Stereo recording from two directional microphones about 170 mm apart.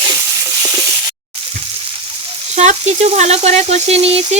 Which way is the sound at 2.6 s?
40° right (ahead or behind).